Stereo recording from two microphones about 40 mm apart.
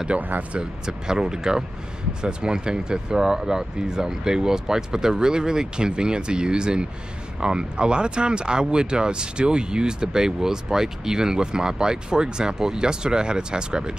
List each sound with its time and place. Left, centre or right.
0.2 s speech: right
0.8 s speech: centre